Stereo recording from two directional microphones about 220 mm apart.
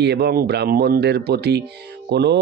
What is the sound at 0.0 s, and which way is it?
Speech, 50° right (ahead or behind).